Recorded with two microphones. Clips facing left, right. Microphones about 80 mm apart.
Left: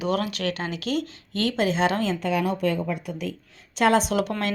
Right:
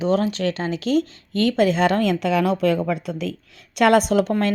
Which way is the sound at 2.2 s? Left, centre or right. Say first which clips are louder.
Right 5 dB; right.